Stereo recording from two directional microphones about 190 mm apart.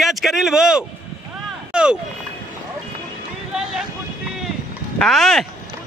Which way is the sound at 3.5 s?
Centre (ahead or behind).